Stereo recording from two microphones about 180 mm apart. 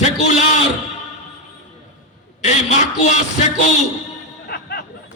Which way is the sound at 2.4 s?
40° left (ahead or behind).